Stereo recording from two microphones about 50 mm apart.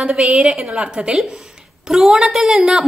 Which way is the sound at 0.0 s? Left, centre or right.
Centre.